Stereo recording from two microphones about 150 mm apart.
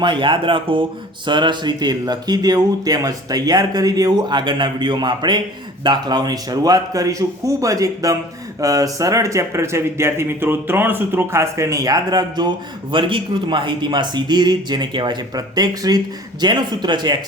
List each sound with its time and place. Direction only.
0.0 s speech: 30° right (ahead or behind)